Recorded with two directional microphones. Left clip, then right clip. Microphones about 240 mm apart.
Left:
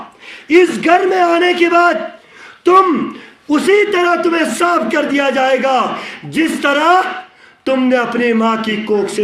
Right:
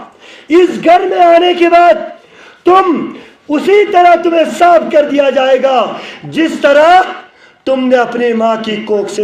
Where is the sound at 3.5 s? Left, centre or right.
Left.